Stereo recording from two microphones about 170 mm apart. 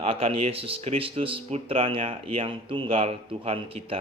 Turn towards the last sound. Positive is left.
turn(degrees=-35)  # may be behind; listen again after turning